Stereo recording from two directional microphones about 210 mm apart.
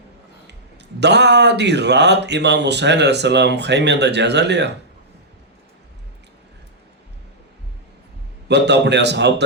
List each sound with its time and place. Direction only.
0.9 s speech: 55° right (ahead or behind)
8.4 s speech: 55° right (ahead or behind)